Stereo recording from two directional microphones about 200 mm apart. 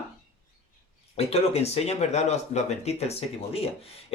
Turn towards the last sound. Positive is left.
turn(degrees=30)  # may be behind; listen again after turning